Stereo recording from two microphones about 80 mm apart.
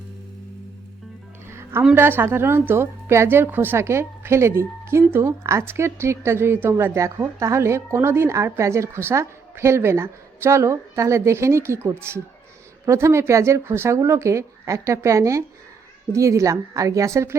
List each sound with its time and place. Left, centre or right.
1.5 s music: right
2.0 s a woman's voice: right